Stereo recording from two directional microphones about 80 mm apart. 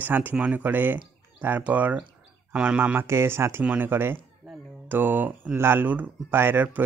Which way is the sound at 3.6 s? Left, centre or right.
Right.